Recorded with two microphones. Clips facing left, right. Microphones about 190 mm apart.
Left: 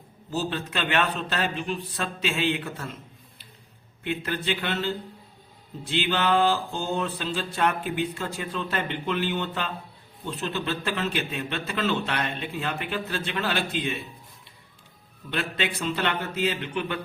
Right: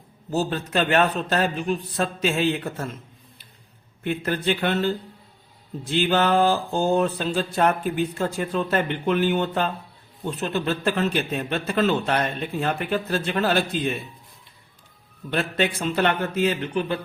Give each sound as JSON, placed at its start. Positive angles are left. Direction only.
{"t": 0.3, "sound": "mantra", "side_deg": -45}
{"t": 4.0, "sound": "mantra", "side_deg": -45}
{"t": 15.3, "sound": "mantra", "side_deg": -45}